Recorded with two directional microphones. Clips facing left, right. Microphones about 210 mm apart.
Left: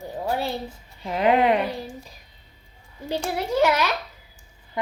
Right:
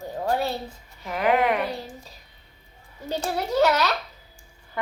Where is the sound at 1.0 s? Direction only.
25° left (ahead or behind).